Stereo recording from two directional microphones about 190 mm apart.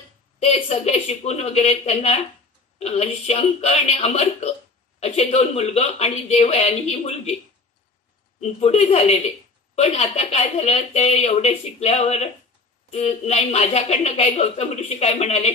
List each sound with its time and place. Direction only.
0.4 s a woman's voice: 35° left (ahead or behind)
8.4 s a woman's voice: 35° left (ahead or behind)